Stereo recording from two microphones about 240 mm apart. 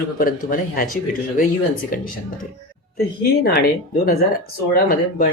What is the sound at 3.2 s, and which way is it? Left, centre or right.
Speech, left.